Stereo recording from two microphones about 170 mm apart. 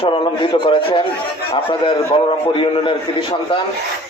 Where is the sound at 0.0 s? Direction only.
30° left (ahead or behind).